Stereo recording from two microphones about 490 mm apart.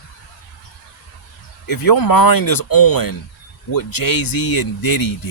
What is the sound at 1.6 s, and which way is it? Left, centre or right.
Speech, left.